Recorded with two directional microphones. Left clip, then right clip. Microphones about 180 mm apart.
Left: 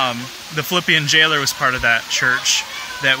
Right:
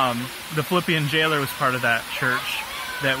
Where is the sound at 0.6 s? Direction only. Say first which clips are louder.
Left 6 dB; 15° left (ahead or behind).